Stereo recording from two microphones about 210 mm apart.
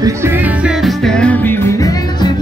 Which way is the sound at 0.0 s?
10° right (ahead or behind).